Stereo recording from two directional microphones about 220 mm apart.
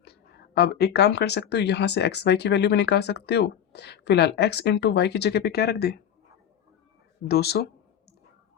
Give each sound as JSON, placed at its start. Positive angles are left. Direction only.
{"t": 0.0, "sound": "speech", "side_deg": 45}
{"t": 7.3, "sound": "speech", "side_deg": 45}